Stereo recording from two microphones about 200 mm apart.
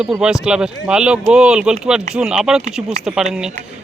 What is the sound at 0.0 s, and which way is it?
A man's voice, 5° right (ahead or behind).